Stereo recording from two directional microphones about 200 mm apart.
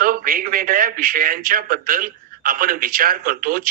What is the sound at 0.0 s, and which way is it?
A man's voice, 45° right (ahead or behind).